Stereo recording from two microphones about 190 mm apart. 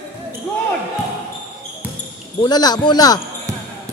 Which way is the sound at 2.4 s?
20° left (ahead or behind).